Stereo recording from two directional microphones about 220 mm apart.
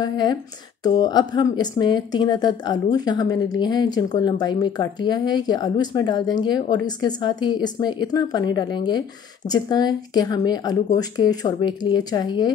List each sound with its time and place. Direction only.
0.0 s speech: 20° left (ahead or behind)